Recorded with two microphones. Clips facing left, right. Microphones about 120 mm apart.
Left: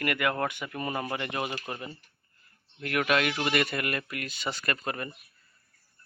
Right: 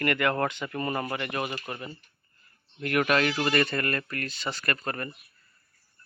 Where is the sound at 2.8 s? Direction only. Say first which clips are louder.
Right 2 dB; centre (ahead or behind).